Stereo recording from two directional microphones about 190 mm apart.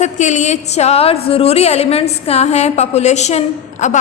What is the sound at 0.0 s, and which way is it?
A woman's voice, 40° left (ahead or behind).